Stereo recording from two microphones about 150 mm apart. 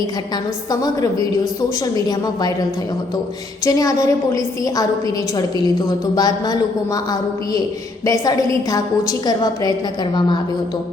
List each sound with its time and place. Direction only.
0.7 s a woman's voice: 25° left (ahead or behind)
3.6 s a woman's voice: 25° left (ahead or behind)
6.1 s a woman's voice: 25° left (ahead or behind)